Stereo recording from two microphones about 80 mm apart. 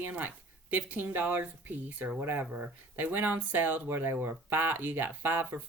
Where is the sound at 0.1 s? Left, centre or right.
Right.